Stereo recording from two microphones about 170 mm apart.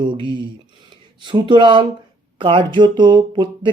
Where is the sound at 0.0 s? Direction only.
30° right (ahead or behind).